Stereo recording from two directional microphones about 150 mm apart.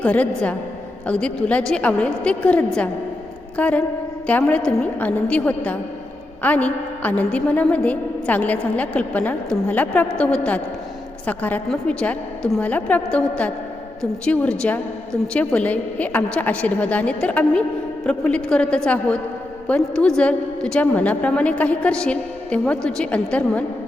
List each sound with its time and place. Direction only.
0.0 s a woman's voice: 10° left (ahead or behind)